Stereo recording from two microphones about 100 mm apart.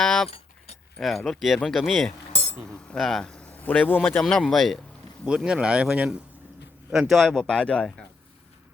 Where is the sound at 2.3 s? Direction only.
90° left.